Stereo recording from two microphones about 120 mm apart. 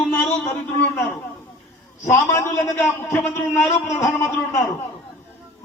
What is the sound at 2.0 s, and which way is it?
A man's voice, 25° left (ahead or behind).